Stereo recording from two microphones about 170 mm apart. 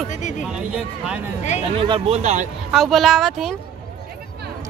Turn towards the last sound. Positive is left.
turn(degrees=0)  # may be behind; listen again after turning